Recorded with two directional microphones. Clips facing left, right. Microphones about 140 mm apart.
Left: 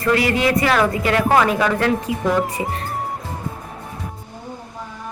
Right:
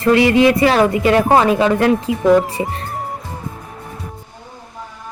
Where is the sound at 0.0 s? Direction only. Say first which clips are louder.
Right 6 dB; 25° right (ahead or behind).